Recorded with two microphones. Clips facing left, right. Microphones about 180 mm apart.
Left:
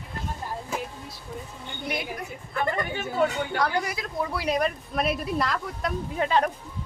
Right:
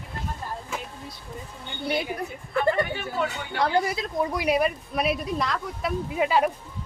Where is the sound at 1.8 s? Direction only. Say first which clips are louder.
Right 5 dB; 30° right (ahead or behind).